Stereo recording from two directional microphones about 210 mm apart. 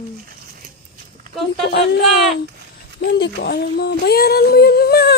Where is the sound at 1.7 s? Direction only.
55° left (ahead or behind).